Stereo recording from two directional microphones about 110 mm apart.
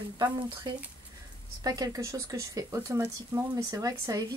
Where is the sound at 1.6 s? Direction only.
30° right (ahead or behind).